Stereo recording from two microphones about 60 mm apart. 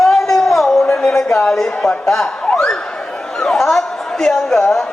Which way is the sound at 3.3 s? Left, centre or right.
Centre.